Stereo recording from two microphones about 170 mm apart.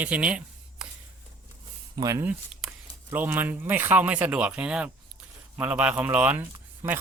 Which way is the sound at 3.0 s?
10° right (ahead or behind).